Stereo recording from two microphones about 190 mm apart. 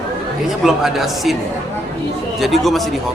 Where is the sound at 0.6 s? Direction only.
Centre (ahead or behind).